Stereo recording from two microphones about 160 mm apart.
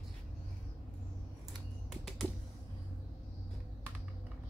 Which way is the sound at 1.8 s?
Centre (ahead or behind).